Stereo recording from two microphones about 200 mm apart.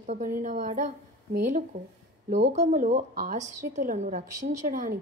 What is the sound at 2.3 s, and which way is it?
A woman's voice, 35° right (ahead or behind).